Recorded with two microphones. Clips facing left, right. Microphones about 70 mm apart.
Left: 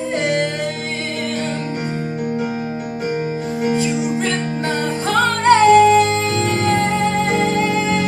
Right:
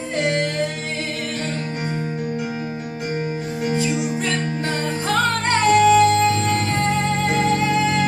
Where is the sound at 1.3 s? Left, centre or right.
Left.